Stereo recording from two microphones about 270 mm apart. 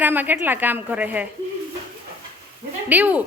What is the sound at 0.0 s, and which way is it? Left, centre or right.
A woman's voice, centre.